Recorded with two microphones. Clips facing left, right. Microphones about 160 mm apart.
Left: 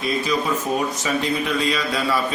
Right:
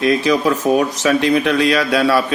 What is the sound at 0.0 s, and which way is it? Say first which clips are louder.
Speech: right 8 dB; 90° right.